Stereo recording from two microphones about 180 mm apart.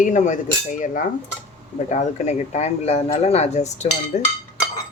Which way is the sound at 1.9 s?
40° left (ahead or behind).